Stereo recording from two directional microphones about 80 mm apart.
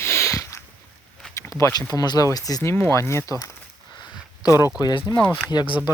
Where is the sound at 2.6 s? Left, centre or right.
Left.